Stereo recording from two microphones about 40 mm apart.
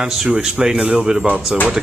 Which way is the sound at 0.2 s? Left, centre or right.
Centre.